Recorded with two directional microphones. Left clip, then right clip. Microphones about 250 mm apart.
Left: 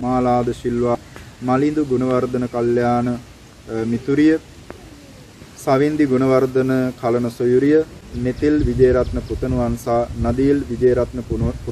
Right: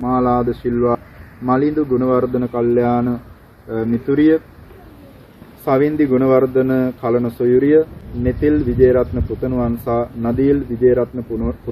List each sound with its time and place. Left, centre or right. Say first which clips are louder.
0.0 s speech: right 1 dB; centre
5.7 s speech: right 1 dB; centre